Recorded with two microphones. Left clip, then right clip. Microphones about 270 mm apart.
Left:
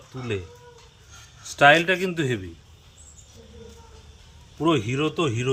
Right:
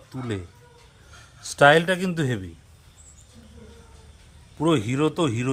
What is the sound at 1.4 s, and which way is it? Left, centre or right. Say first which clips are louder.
A man's voice: even; right.